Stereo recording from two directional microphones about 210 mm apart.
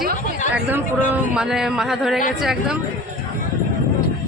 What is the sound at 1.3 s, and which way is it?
Speech, 5° right (ahead or behind).